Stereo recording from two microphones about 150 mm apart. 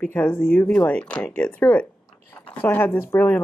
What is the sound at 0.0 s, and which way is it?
A woman's voice, 10° left (ahead or behind).